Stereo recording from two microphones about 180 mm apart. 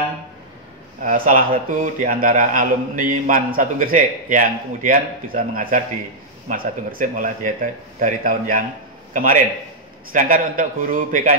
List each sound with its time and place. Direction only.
1.0 s a man's voice: 50° right (ahead or behind)